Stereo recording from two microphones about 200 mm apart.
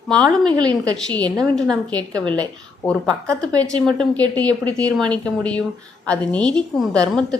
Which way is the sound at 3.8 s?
5° left (ahead or behind).